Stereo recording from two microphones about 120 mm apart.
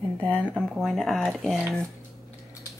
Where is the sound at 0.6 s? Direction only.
Centre (ahead or behind).